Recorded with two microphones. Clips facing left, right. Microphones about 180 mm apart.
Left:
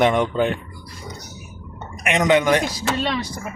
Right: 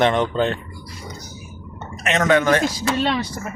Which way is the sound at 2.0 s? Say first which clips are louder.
Even; 15° left (ahead or behind).